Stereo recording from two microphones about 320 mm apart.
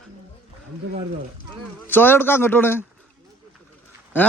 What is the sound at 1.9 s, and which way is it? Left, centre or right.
Speech, centre.